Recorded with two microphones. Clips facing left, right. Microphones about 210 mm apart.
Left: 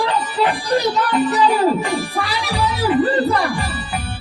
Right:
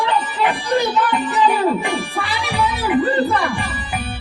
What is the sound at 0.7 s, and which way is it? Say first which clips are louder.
Music: left 1 dB; 40° left (ahead or behind).